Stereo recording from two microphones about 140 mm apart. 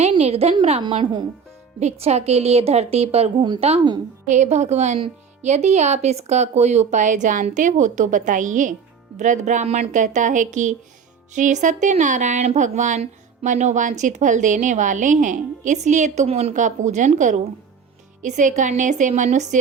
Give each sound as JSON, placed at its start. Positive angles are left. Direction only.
{"t": 0.2, "sound": "a woman's voice", "side_deg": -50}
{"t": 0.8, "sound": "a woman's voice", "side_deg": -35}
{"t": 1.8, "sound": "a woman's voice", "side_deg": -50}